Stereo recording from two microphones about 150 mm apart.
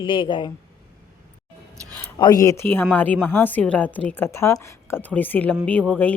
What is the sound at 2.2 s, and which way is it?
A woman's voice, 25° left (ahead or behind).